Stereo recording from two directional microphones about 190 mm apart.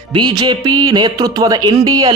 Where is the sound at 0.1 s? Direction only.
25° right (ahead or behind).